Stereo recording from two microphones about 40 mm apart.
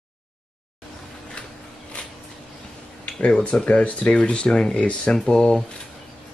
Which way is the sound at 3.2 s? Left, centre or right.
Left.